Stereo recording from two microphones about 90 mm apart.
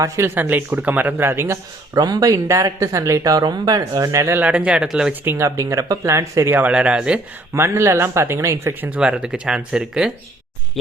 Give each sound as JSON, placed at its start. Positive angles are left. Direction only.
{"t": 0.3, "sound": "speech", "side_deg": -20}
{"t": 2.0, "sound": "speech", "side_deg": -45}
{"t": 4.4, "sound": "speech", "side_deg": -15}
{"t": 5.2, "sound": "speech", "side_deg": -25}
{"t": 5.5, "sound": "speech", "side_deg": -35}
{"t": 6.5, "sound": "speech", "side_deg": -15}
{"t": 7.5, "sound": "speech", "side_deg": -30}
{"t": 8.9, "sound": "speech", "side_deg": -10}